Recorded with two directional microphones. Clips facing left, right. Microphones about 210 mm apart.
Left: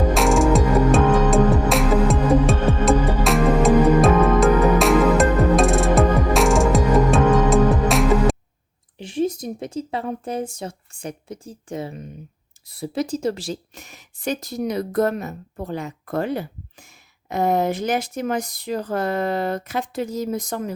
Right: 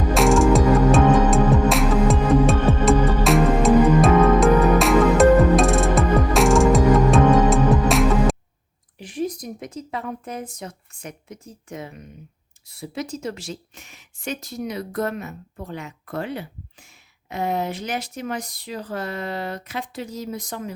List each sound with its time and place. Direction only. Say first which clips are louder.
0.1 s music: right 4 dB; centre (ahead or behind)
9.0 s speech: left 4 dB; 25° left (ahead or behind); by 20.7 s 45° left (ahead or behind)